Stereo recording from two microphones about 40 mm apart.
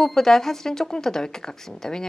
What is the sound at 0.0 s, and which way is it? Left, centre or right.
Speech, centre.